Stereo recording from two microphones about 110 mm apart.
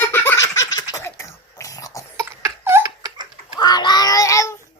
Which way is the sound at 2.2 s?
25° right (ahead or behind).